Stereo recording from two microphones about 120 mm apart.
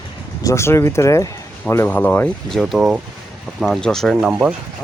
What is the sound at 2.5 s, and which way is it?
Speech, centre (ahead or behind).